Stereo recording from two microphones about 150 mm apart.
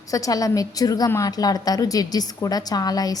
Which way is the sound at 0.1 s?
25° left (ahead or behind).